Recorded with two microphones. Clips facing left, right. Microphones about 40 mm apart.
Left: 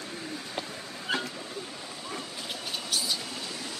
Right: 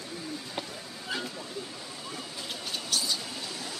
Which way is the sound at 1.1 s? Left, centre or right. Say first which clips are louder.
Left 4 dB; left.